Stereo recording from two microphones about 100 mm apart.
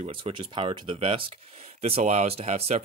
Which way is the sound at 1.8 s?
85° right.